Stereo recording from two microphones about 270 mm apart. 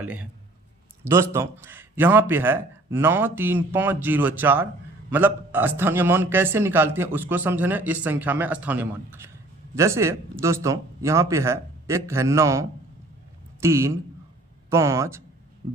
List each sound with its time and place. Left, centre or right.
0.0 s a man's voice: centre